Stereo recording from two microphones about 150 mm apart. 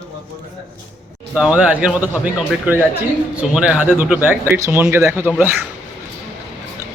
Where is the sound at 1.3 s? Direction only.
5° right (ahead or behind).